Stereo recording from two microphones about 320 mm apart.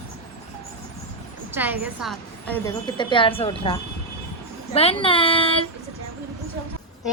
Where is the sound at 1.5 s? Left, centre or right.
Centre.